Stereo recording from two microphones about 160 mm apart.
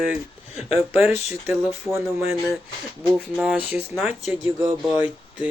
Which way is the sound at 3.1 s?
Centre (ahead or behind).